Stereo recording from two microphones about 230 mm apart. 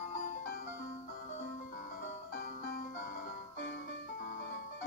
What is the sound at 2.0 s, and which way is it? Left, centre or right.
Music, left.